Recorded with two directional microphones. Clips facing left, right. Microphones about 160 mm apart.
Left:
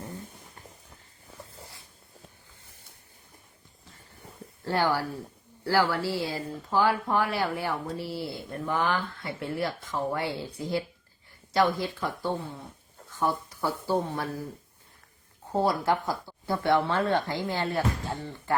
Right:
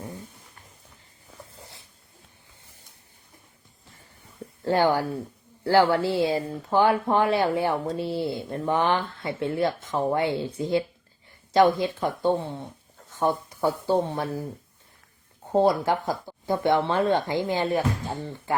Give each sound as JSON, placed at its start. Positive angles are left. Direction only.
{"t": 4.6, "sound": "speech", "side_deg": -20}
{"t": 15.5, "sound": "speech", "side_deg": -20}